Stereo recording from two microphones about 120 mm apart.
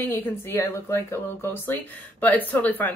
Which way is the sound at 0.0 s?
20° left (ahead or behind).